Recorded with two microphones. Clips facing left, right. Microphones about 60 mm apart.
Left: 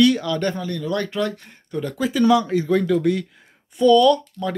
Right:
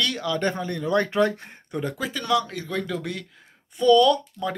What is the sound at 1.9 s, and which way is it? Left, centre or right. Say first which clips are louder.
Speech: left 8 dB; centre.